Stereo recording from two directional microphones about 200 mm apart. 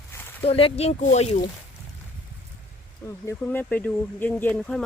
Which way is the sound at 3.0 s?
10° left (ahead or behind).